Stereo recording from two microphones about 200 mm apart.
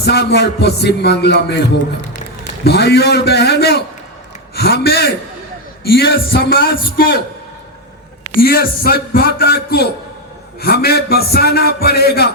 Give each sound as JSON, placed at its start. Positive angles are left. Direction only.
{"t": 0.0, "sound": "a man's voice", "side_deg": 55}
{"t": 8.4, "sound": "a man's voice", "side_deg": 50}